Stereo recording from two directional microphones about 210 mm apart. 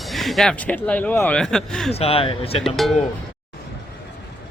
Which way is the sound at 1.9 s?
30° left (ahead or behind).